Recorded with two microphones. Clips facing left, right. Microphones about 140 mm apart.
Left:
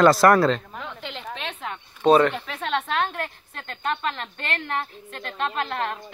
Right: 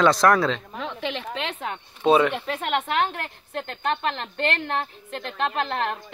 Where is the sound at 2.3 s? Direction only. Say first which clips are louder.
Right 2 dB; 20° right (ahead or behind).